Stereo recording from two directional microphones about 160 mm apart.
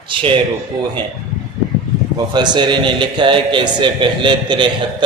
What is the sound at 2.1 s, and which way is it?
A man's voice, 25° right (ahead or behind).